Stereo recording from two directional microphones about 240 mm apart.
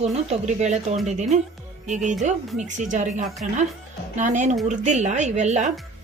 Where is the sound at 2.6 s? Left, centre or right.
Right.